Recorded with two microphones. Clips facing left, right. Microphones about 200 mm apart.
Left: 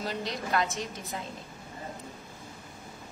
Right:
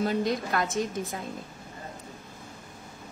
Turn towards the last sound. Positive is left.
turn(degrees=-50)  # may be behind; listen again after turning